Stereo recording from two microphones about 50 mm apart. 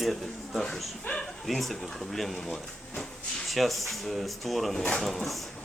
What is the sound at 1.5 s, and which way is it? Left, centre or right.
Speech, centre.